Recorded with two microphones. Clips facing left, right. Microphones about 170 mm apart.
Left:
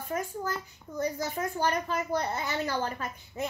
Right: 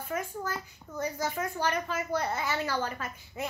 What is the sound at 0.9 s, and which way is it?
Speech, 35° left (ahead or behind).